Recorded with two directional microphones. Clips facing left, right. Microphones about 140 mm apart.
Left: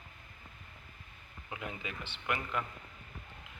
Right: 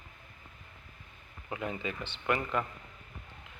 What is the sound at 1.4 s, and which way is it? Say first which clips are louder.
Speech: right 6 dB; 35° right (ahead or behind).